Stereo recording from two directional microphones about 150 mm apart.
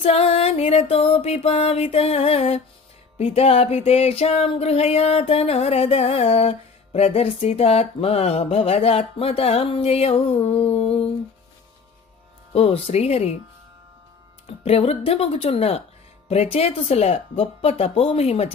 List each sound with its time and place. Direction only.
0.0 s music: 40° left (ahead or behind)
12.5 s speech: 40° left (ahead or behind)
14.6 s music: 45° left (ahead or behind)